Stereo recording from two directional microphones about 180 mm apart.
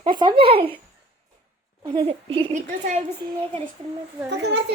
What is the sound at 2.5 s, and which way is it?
Speech, 40° right (ahead or behind).